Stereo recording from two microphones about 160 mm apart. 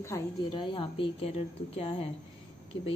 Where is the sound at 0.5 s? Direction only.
30° left (ahead or behind).